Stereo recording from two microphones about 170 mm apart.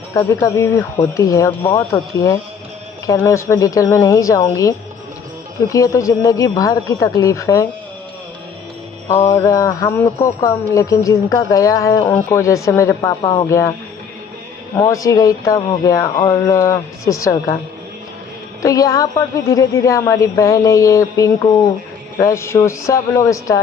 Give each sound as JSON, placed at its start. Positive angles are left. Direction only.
{"t": 0.2, "sound": "speech", "side_deg": 15}
{"t": 9.2, "sound": "speech", "side_deg": 15}
{"t": 14.8, "sound": "speech", "side_deg": 20}
{"t": 18.6, "sound": "speech", "side_deg": 20}